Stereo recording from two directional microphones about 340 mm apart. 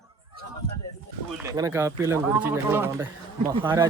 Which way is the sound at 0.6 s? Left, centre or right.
Centre.